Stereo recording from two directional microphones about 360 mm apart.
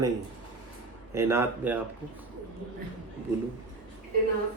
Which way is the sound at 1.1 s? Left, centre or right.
Centre.